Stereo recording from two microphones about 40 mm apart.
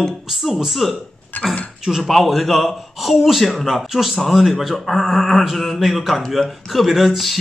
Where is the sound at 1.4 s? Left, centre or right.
Left.